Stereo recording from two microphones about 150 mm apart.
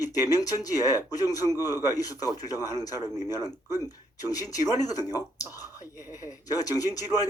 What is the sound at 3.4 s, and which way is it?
Speech, 25° left (ahead or behind).